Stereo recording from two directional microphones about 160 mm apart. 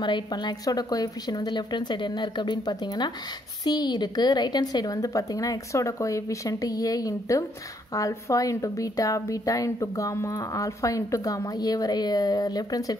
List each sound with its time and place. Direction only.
0.0 s a woman's voice: 30° left (ahead or behind)